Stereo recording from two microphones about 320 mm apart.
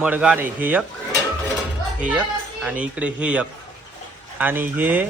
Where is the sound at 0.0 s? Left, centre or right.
Centre.